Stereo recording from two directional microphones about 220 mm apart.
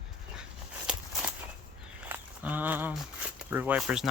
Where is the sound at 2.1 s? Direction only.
10° right (ahead or behind).